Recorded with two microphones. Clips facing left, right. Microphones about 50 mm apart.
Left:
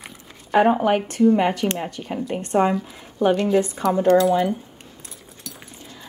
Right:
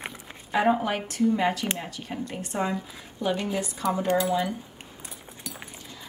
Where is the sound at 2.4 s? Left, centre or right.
Left.